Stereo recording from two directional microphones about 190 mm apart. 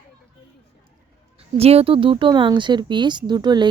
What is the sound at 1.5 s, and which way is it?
Speech, 30° right (ahead or behind).